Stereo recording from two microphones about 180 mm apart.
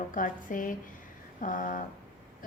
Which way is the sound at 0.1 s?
50° left (ahead or behind).